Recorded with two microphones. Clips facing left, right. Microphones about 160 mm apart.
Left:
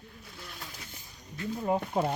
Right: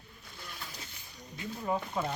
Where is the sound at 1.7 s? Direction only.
35° left (ahead or behind).